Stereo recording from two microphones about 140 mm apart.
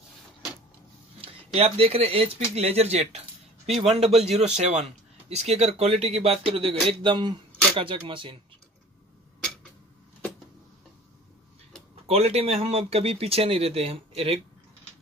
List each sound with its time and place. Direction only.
1.2 s speech: 45° right (ahead or behind)
12.1 s speech: 45° right (ahead or behind)